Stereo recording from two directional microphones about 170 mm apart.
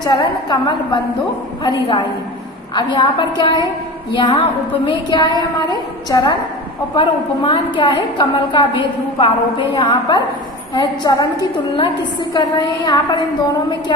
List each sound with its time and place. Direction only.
0.0 s a woman's voice: 25° left (ahead or behind)
1.6 s a woman's voice: 25° left (ahead or behind)